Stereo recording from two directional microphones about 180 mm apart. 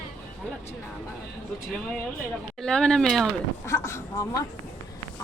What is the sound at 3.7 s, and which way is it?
Speech, 15° left (ahead or behind).